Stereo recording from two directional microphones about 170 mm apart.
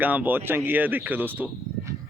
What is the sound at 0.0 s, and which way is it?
Speech, 10° right (ahead or behind).